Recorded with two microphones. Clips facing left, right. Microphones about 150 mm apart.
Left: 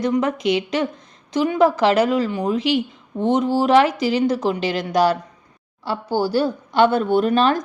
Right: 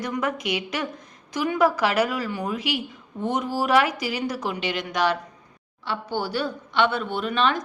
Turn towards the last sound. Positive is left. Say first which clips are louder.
# left 7 dB
turn(degrees=40)  # may be behind; listen again after turning